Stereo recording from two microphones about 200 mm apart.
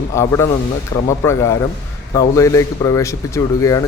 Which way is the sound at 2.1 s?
15° left (ahead or behind).